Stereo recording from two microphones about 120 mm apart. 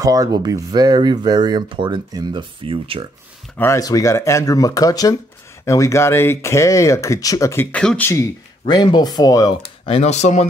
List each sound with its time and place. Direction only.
0.0 s speech: 30° right (ahead or behind); by 3.1 s 50° right (ahead or behind)
3.5 s speech: 25° left (ahead or behind)
7.7 s speech: 10° left (ahead or behind)
8.6 s speech: 35° left (ahead or behind)
9.6 s speech: 55° left (ahead or behind); by 10.4 s 75° left (ahead or behind)